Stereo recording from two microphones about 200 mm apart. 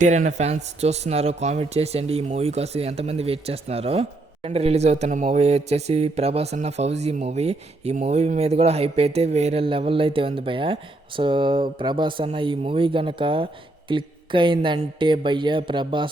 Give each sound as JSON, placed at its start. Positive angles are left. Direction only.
{"t": 0.0, "sound": "a man's voice", "side_deg": -40}